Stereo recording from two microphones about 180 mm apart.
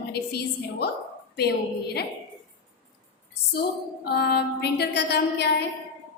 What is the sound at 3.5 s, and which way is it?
A woman's voice, 60° left (ahead or behind).